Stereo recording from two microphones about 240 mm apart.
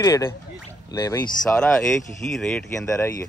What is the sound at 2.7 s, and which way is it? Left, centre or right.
Speech, centre.